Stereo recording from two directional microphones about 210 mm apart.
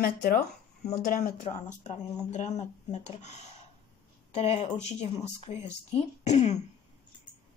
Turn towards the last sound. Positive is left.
turn(degrees=30)  # may be behind; listen again after turning